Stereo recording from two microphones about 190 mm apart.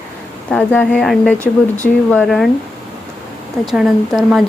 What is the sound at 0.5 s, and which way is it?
Speech, 5° left (ahead or behind).